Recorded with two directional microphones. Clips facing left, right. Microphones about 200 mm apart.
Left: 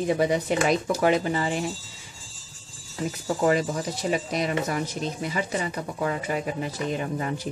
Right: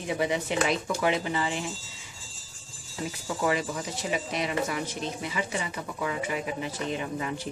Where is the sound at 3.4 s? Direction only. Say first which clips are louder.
Left 5 dB; 40° left (ahead or behind).